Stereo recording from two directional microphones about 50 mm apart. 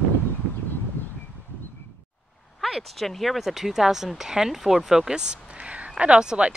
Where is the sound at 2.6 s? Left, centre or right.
Centre.